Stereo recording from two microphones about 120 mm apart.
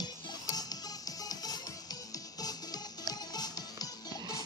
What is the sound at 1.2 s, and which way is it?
Music, 30° left (ahead or behind).